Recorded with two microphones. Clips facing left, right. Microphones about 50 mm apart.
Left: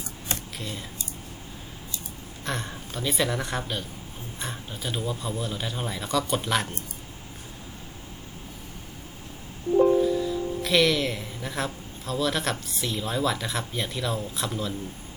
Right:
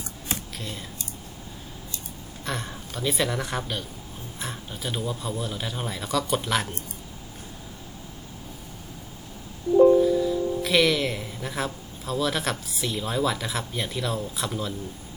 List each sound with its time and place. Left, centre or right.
0.3 s a sound: centre
2.4 s speech: centre
9.8 s music: left
10.2 s speech: centre